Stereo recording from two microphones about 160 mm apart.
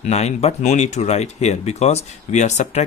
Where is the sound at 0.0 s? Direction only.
45° left (ahead or behind).